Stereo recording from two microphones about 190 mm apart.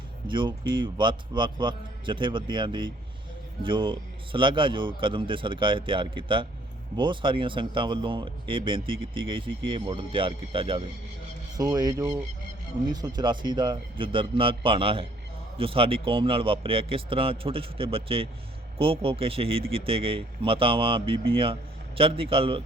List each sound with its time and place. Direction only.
0.3 s speech: 25° right (ahead or behind)